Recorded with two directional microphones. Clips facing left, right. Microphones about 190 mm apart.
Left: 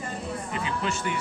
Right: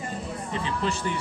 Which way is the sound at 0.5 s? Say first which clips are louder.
Right 3 dB; 35° right (ahead or behind).